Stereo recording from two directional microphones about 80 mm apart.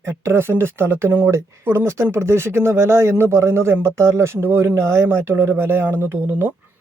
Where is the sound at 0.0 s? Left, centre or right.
Right.